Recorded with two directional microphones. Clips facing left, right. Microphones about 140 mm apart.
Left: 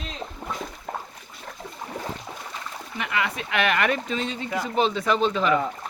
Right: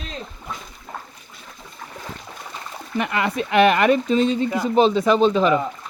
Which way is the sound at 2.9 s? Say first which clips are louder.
Right 6 dB; 45° right (ahead or behind).